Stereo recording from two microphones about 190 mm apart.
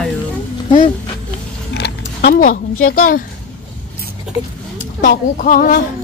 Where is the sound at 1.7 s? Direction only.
60° left (ahead or behind).